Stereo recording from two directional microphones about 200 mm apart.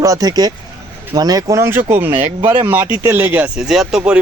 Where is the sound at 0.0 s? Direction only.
15° right (ahead or behind).